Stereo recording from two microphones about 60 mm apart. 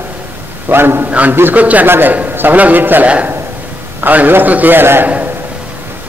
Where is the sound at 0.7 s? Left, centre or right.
Right.